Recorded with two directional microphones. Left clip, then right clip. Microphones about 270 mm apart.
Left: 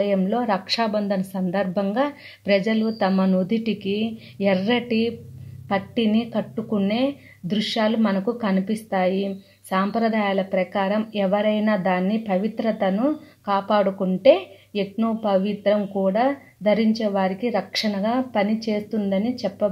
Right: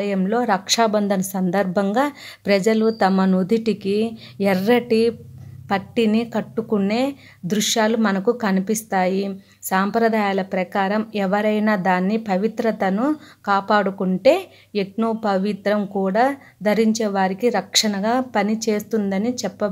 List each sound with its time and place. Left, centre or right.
0.0 s a woman's voice: right